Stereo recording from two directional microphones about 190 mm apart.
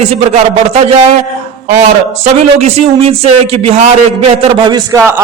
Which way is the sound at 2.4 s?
35° right (ahead or behind).